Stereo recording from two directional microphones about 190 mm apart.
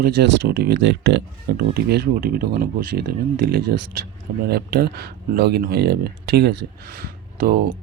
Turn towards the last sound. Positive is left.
turn(degrees=-50)  # may be behind; listen again after turning